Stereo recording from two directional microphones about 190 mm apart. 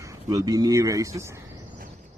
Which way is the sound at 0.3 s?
20° right (ahead or behind).